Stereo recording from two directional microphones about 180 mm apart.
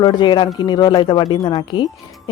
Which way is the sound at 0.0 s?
25° left (ahead or behind).